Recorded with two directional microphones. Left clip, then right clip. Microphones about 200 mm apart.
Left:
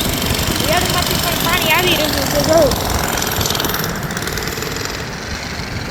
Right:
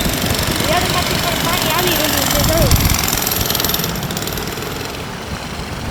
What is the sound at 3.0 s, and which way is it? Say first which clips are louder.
Jackhammer: even; 55° right (ahead or behind).